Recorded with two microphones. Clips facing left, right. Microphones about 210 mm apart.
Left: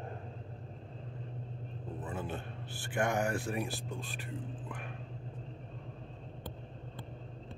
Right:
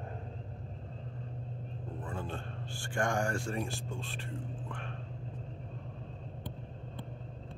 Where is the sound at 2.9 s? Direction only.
5° left (ahead or behind).